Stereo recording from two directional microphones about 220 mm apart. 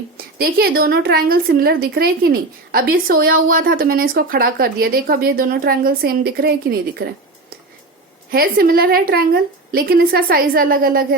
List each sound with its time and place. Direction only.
0.3 s a woman's voice: 45° right (ahead or behind)
8.3 s a woman's voice: 40° right (ahead or behind)